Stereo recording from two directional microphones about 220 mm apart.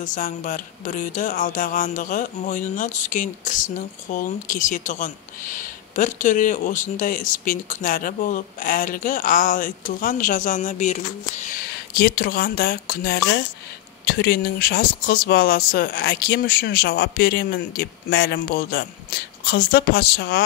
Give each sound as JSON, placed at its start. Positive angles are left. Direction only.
{"t": 0.0, "sound": "speech", "side_deg": 35}